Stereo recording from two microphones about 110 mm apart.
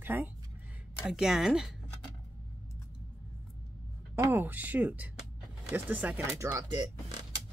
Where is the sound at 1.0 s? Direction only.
5° right (ahead or behind).